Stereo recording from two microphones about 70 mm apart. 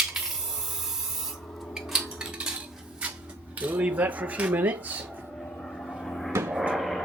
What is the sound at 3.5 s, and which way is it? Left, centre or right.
Speech, right.